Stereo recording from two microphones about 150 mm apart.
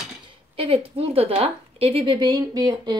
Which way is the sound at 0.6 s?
40° right (ahead or behind).